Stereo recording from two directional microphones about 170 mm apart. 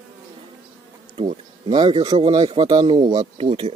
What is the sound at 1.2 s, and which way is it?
Speech, 30° right (ahead or behind).